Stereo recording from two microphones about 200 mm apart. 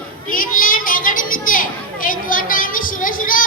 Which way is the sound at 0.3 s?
45° left (ahead or behind).